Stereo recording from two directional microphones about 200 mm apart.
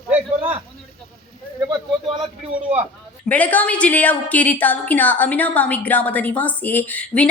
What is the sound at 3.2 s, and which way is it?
A woman's voice, 5° left (ahead or behind).